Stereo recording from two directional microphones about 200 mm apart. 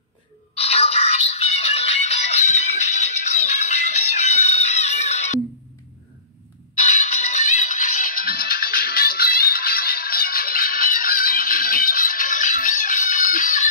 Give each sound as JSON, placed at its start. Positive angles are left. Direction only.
{"t": 0.6, "sound": "music", "side_deg": 30}
{"t": 7.0, "sound": "music", "side_deg": 35}